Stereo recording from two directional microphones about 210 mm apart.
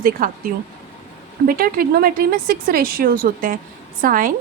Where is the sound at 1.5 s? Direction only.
45° right (ahead or behind).